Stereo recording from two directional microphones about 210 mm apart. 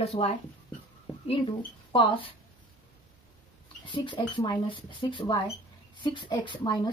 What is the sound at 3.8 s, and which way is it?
A woman's voice, 25° left (ahead or behind).